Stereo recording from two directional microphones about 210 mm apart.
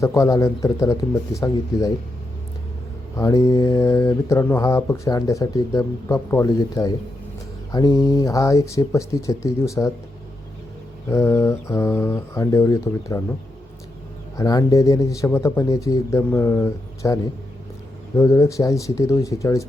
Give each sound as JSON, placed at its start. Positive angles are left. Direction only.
{"t": 0.0, "sound": "speech", "side_deg": 15}
{"t": 3.2, "sound": "speech", "side_deg": 15}
{"t": 11.1, "sound": "speech", "side_deg": 15}
{"t": 14.3, "sound": "speech", "side_deg": 15}
{"t": 18.2, "sound": "speech", "side_deg": 15}